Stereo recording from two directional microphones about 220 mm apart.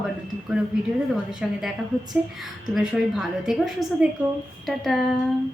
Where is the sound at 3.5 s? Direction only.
Centre (ahead or behind).